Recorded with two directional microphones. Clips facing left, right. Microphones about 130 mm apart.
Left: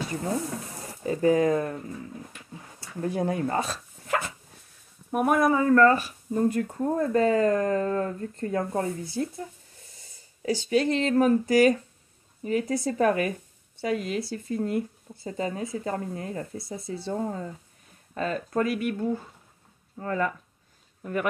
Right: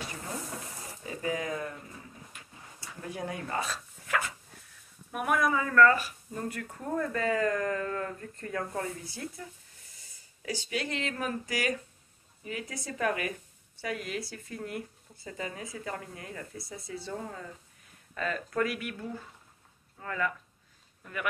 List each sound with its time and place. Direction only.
1.0 s speech: 40° left (ahead or behind)
3.0 s speech: 35° left (ahead or behind)